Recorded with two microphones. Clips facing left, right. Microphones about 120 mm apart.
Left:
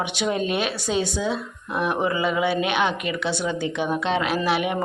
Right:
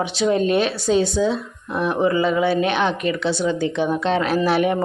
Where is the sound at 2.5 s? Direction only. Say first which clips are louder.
Right 3 dB; 35° right (ahead or behind).